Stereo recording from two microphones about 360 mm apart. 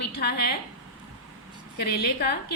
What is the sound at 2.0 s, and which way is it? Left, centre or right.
Speech, left.